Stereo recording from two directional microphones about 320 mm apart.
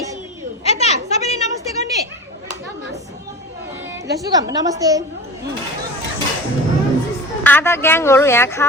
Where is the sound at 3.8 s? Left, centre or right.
Centre.